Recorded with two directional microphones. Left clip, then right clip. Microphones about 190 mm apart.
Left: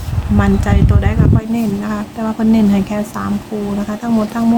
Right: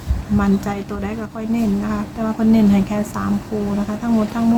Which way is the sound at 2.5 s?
15° left (ahead or behind).